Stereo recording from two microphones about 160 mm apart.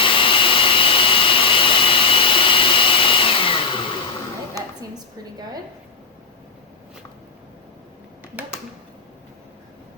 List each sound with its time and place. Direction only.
0.0 s jet engine: 35° left (ahead or behind)